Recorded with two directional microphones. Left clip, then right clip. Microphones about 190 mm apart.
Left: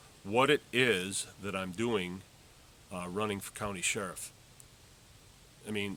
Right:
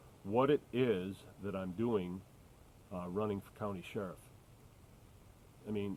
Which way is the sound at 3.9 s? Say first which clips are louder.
Left 4 dB; 30° left (ahead or behind).